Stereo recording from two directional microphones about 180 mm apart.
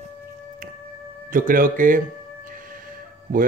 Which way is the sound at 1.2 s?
50° right (ahead or behind).